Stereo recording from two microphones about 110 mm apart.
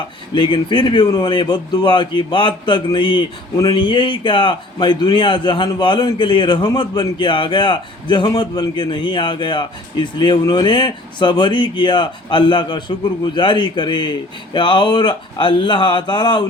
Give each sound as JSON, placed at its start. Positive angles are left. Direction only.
{"t": 0.3, "sound": "speech", "side_deg": 45}